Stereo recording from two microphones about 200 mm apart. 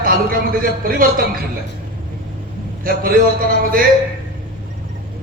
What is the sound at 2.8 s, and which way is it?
Speech, 45° right (ahead or behind).